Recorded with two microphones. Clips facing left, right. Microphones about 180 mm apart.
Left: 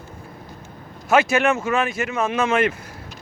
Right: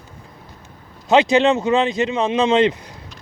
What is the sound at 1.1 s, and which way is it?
Speech, 20° right (ahead or behind).